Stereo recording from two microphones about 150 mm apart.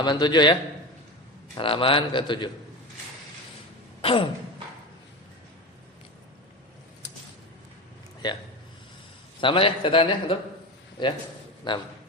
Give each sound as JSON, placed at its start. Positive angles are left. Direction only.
{"t": 0.0, "sound": "a man's voice", "side_deg": 30}
{"t": 1.5, "sound": "a man's voice", "side_deg": 35}
{"t": 4.0, "sound": "a sound", "side_deg": 35}
{"t": 7.0, "sound": "a sound", "side_deg": 25}
{"t": 8.2, "sound": "a man's voice", "side_deg": 30}
{"t": 9.4, "sound": "a man's voice", "side_deg": 35}